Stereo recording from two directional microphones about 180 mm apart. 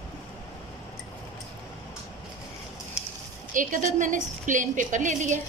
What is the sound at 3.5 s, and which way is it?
A woman's voice, 45° right (ahead or behind).